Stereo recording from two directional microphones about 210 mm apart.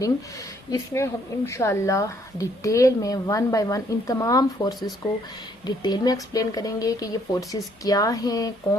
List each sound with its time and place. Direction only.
0.7 s speech: 15° left (ahead or behind)